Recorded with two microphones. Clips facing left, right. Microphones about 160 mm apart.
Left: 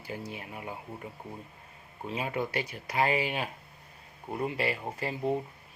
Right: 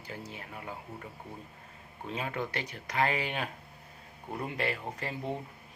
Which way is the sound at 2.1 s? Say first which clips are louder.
Left 3 dB; 10° left (ahead or behind).